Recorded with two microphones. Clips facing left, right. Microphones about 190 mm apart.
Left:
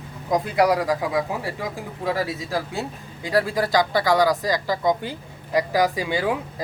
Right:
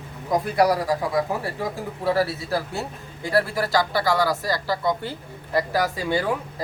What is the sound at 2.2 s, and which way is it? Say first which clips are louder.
Speech: even; 15° left (ahead or behind).